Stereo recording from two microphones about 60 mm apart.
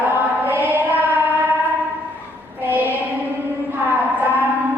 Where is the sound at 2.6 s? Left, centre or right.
Right.